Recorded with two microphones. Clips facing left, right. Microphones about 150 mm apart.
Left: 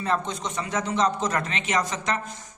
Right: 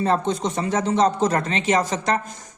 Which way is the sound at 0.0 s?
35° right (ahead or behind).